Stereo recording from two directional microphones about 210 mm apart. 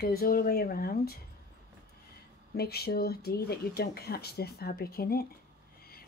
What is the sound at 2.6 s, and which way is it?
A woman's voice, 50° left (ahead or behind).